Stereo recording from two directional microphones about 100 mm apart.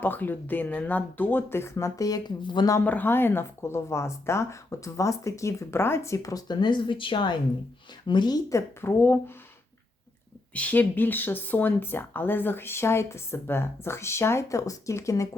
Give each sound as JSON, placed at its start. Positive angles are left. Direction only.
{"t": 0.0, "sound": "speech", "side_deg": 20}
{"t": 2.8, "sound": "speech", "side_deg": 15}
{"t": 8.4, "sound": "speech", "side_deg": 25}
{"t": 10.5, "sound": "speech", "side_deg": 15}